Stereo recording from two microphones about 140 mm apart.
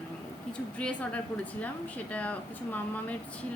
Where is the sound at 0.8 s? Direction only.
10° left (ahead or behind).